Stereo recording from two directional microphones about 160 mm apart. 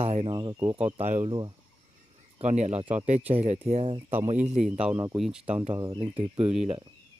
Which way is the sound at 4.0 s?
15° right (ahead or behind).